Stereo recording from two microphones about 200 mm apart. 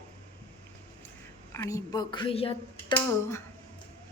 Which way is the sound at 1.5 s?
15° left (ahead or behind).